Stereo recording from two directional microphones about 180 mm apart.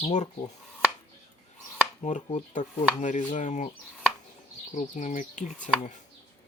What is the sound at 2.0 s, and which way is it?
Speech, 40° left (ahead or behind).